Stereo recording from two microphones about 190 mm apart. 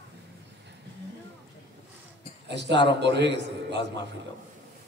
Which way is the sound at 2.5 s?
65° right (ahead or behind).